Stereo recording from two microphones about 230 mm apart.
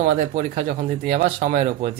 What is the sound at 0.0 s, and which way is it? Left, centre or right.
Speech, right.